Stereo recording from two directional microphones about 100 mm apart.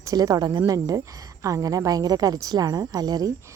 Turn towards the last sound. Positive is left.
turn(degrees=-40)  # may be behind; listen again after turning